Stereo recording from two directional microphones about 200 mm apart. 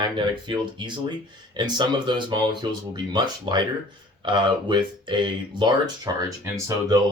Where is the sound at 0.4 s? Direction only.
25° right (ahead or behind).